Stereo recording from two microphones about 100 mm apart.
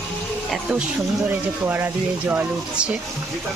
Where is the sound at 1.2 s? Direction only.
20° right (ahead or behind).